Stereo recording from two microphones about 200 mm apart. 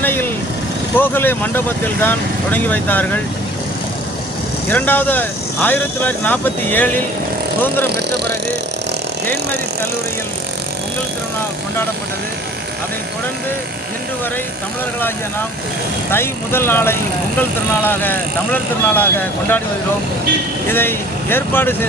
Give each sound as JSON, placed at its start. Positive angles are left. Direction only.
{"t": 0.0, "sound": "vehicle", "side_deg": 10}
{"t": 0.9, "sound": "speech", "side_deg": 10}
{"t": 4.7, "sound": "speech", "side_deg": 10}
{"t": 7.9, "sound": "speech", "side_deg": -55}
{"t": 16.1, "sound": "speech", "side_deg": 10}
{"t": 20.7, "sound": "speech", "side_deg": 10}